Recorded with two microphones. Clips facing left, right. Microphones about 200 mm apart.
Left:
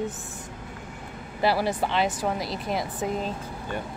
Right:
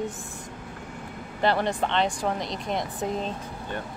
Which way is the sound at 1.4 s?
5° left (ahead or behind).